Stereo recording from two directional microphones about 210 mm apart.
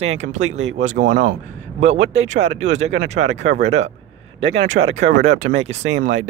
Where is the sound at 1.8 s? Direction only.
30° right (ahead or behind).